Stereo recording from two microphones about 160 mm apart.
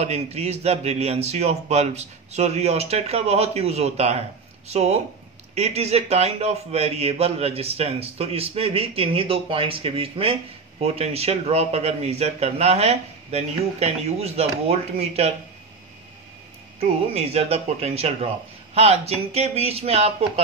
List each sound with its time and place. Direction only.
0.0 s a man's voice: 40° right (ahead or behind)
16.8 s a man's voice: 40° right (ahead or behind)